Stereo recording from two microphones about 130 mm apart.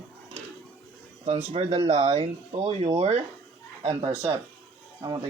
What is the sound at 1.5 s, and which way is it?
Speech, 50° right (ahead or behind).